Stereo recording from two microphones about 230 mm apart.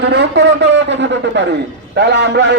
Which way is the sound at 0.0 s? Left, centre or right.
Right.